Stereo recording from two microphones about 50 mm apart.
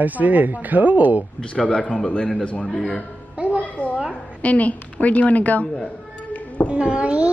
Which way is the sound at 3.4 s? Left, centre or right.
Right.